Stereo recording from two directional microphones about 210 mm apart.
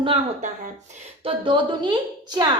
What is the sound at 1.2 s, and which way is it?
Speech, 25° right (ahead or behind).